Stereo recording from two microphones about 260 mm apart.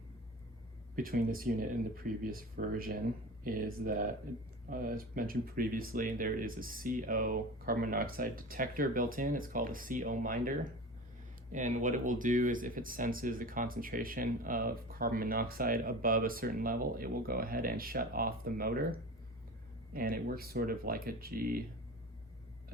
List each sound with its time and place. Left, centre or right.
0.9 s speech: right